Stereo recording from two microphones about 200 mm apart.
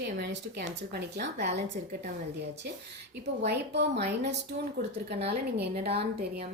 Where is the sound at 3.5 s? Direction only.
55° right (ahead or behind).